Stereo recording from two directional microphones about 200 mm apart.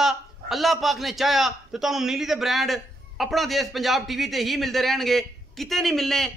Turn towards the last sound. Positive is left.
turn(degrees=0)  # may be behind; listen again after turning